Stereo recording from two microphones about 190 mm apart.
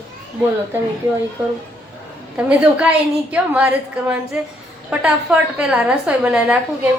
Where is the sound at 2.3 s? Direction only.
5° right (ahead or behind).